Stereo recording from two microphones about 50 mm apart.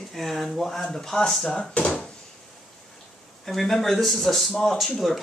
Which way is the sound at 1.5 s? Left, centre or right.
Centre.